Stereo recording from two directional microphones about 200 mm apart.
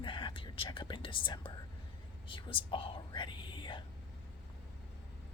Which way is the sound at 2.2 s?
25° left (ahead or behind).